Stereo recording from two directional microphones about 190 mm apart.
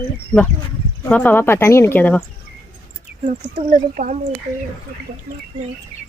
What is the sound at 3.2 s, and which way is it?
Speech, 40° right (ahead or behind).